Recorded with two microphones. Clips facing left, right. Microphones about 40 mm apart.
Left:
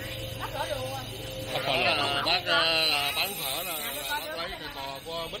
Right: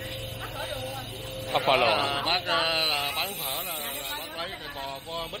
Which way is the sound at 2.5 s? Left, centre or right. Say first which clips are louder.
Left 2 dB; left.